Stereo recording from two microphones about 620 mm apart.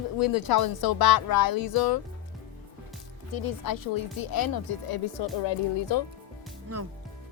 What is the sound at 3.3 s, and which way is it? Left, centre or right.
Speech, left.